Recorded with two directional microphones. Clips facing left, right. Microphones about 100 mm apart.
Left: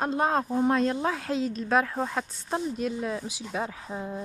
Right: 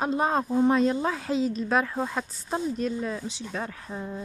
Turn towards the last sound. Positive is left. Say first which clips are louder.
# left 1 dB
turn(degrees=10)  # may be behind; listen again after turning